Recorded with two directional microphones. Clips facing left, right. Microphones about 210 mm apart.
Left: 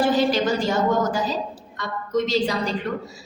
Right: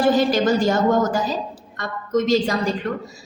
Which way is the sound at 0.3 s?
50° right (ahead or behind).